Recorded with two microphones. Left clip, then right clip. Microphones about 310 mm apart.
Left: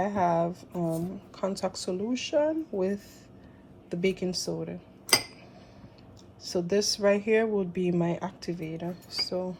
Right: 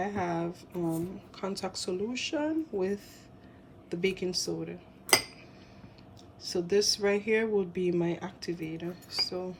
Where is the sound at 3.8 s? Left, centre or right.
Centre.